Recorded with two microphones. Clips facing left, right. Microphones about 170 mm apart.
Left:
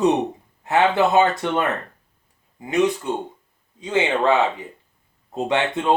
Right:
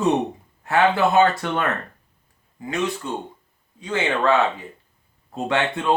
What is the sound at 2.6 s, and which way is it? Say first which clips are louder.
Speech: left 5 dB; 20° left (ahead or behind).